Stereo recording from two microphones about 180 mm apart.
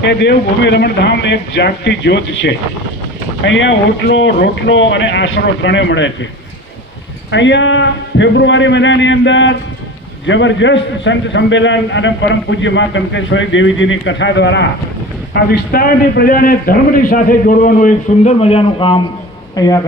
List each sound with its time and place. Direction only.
0.0 s a man's voice: 75° left (ahead or behind); by 6.1 s 90° left
7.3 s a man's voice: 90° left
15.3 s a man's voice: 65° left (ahead or behind)
18.3 s a man's voice: 35° left (ahead or behind)